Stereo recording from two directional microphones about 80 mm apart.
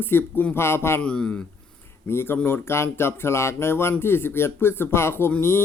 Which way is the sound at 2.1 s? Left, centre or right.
Left.